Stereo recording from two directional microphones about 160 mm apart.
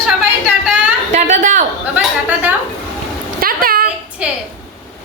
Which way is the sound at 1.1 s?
50° right (ahead or behind).